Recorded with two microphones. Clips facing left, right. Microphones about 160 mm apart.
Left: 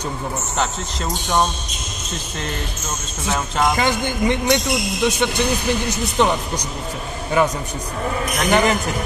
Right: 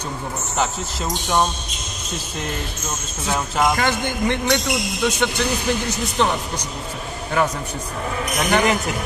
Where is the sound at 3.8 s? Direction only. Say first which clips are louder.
Left 2 dB; 15° left (ahead or behind).